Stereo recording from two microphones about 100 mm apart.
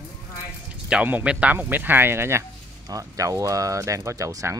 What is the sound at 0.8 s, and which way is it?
Speech, 15° right (ahead or behind).